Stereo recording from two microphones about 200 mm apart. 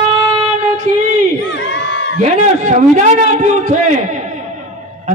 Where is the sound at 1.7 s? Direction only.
65° left (ahead or behind).